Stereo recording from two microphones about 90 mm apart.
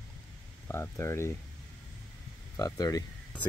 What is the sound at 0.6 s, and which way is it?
Speech, 25° left (ahead or behind).